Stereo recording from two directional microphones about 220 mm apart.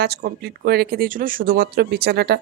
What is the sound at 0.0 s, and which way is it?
Speech, 45° right (ahead or behind).